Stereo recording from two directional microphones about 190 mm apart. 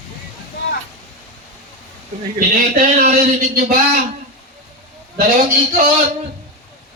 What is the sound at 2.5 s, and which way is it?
A man's voice, 45° right (ahead or behind).